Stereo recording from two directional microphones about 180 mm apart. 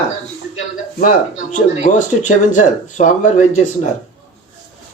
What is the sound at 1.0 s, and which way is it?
Speech, 45° left (ahead or behind).